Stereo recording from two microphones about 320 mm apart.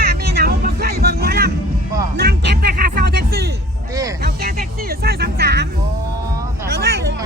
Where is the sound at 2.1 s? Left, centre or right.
Right.